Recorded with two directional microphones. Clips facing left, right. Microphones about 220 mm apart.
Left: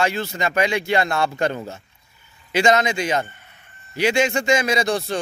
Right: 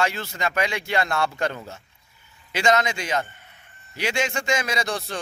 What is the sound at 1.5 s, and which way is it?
Speech, 30° left (ahead or behind).